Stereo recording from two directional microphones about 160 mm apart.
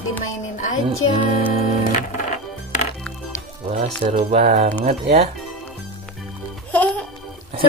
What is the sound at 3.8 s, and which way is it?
Speech, 45° right (ahead or behind).